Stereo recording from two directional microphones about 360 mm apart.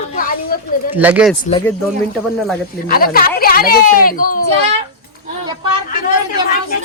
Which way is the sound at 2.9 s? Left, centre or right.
Left.